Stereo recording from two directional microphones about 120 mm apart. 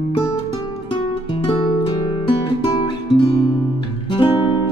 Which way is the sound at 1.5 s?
45° left (ahead or behind).